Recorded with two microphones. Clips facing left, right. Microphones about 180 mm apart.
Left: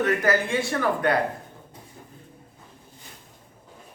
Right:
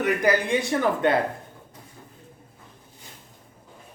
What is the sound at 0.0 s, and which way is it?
Speech, 15° right (ahead or behind).